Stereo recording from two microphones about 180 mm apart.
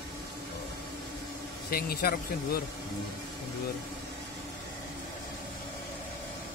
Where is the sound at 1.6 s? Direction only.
55° left (ahead or behind).